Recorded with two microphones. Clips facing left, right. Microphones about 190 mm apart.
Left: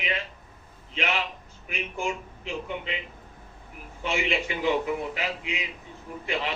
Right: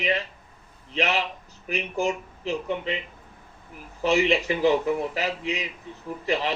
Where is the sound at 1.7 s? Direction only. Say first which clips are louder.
Right 5 dB; 40° right (ahead or behind).